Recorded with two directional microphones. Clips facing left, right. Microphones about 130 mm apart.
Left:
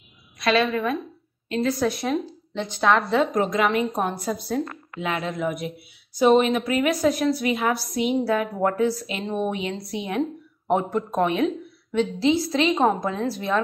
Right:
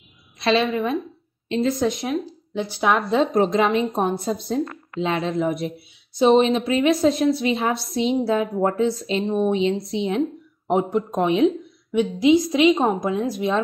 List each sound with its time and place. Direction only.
0.4 s a woman's voice: 25° right (ahead or behind)
2.0 s a woman's voice: 5° right (ahead or behind)
3.3 s a woman's voice: 30° right (ahead or behind)